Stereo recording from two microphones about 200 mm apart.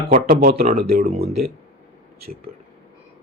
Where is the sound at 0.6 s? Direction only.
30° right (ahead or behind).